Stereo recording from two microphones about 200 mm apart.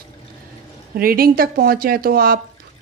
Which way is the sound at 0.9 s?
45° right (ahead or behind).